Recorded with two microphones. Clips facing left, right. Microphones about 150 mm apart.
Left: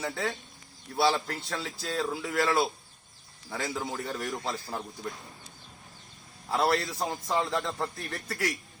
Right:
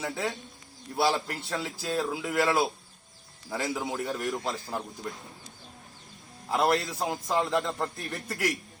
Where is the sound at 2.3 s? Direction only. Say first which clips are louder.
Right 2 dB; 25° right (ahead or behind).